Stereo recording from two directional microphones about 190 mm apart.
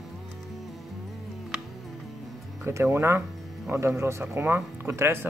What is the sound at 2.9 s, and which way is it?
Speech, 15° right (ahead or behind).